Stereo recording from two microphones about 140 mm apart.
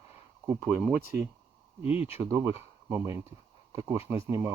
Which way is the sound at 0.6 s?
5° right (ahead or behind).